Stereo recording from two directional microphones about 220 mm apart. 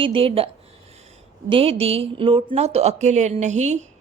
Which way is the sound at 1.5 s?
25° right (ahead or behind).